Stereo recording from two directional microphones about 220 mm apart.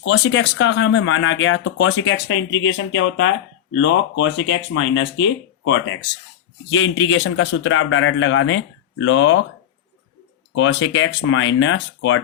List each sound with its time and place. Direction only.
0.0 s speech: 60° left (ahead or behind)
6.7 s speech: 60° left (ahead or behind)
10.5 s speech: 55° left (ahead or behind)